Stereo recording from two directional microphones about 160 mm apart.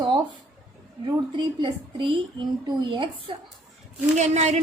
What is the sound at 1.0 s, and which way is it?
Speech, 30° right (ahead or behind).